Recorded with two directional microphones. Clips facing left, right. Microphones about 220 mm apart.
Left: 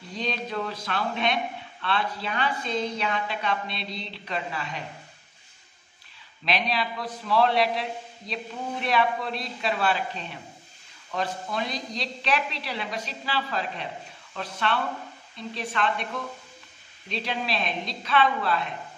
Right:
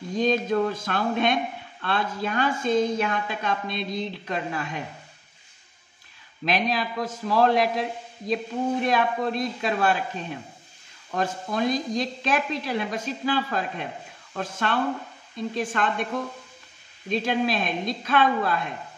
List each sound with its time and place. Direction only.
0.1 s speech: 45° right (ahead or behind)
6.4 s speech: 45° right (ahead or behind)
8.8 s speech: 45° right (ahead or behind)
17.1 s speech: 50° right (ahead or behind)